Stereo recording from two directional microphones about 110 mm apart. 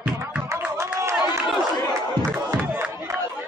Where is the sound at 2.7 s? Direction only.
15° right (ahead or behind).